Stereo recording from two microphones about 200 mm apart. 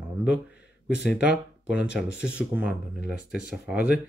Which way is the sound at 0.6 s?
55° left (ahead or behind).